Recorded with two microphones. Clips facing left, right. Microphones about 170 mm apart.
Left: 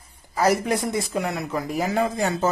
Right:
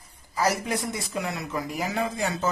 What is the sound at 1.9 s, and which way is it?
Speech, 50° left (ahead or behind).